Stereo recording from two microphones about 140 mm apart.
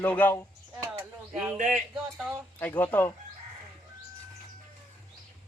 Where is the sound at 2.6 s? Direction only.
15° left (ahead or behind).